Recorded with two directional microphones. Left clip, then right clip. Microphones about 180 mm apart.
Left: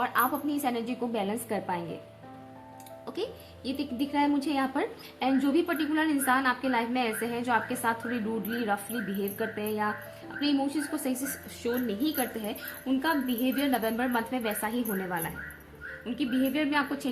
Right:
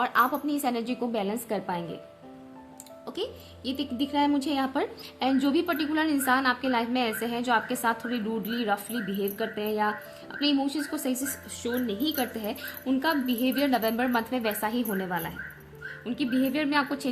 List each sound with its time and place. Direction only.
0.0 s speech: 35° right (ahead or behind)
3.1 s speech: 30° right (ahead or behind)